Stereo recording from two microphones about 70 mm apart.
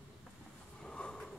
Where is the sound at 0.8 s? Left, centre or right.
Centre.